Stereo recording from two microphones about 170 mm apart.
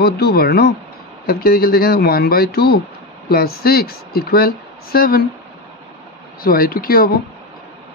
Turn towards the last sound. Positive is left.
turn(degrees=60)  # may be behind; listen again after turning